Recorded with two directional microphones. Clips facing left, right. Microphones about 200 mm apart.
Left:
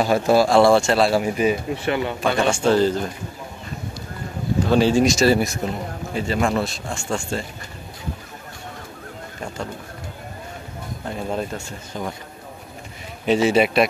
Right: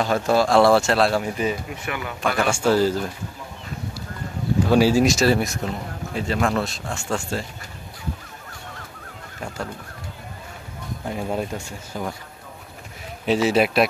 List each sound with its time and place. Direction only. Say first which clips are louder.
0.0 s speech: left 3 dB; 10° left (ahead or behind)
1.2 s speech: left 4 dB; 15° left (ahead or behind)
1.7 s speech: left 7 dB; 30° left (ahead or behind)
2.5 s speech: left 1 dB; 5° right (ahead or behind)
4.6 s speech: even; 10° right (ahead or behind)
11.1 s speech: even; 10° right (ahead or behind)
13.2 s speech: left 2 dB; centre (ahead or behind)